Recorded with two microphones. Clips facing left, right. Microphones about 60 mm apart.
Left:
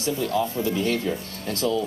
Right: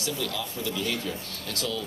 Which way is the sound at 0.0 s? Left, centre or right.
Left.